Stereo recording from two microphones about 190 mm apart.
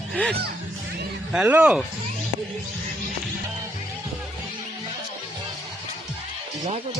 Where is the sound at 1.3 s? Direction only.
5° right (ahead or behind).